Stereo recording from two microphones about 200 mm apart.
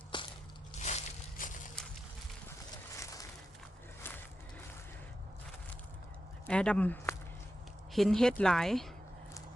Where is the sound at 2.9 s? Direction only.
15° left (ahead or behind).